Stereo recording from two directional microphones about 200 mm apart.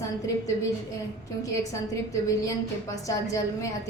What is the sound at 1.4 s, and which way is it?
A woman's voice, 15° left (ahead or behind).